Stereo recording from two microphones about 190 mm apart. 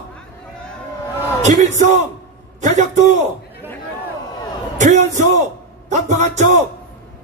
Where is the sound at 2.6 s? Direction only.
40° right (ahead or behind).